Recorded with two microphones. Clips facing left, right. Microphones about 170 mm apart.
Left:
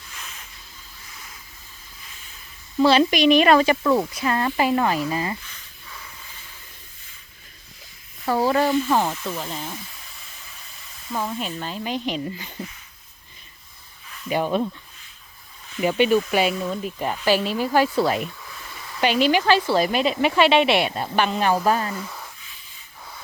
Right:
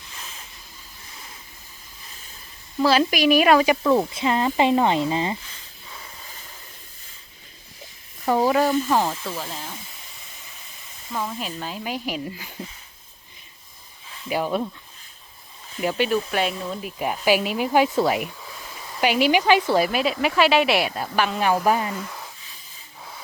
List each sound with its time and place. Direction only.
0.2 s a sound: 30° right (ahead or behind)
2.7 s speech: centre (ahead or behind)
4.0 s a sound: 25° right (ahead or behind); by 6.5 s 40° right (ahead or behind)
8.3 s speech: 15° right (ahead or behind)
11.1 s speech: centre (ahead or behind)
14.3 s speech: 5° right (ahead or behind)
15.8 s speech: centre (ahead or behind)